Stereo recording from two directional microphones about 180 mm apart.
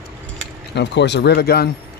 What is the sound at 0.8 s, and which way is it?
Speech, 75° left (ahead or behind).